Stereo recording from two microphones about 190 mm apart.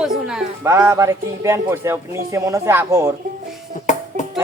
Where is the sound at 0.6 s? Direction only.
15° right (ahead or behind).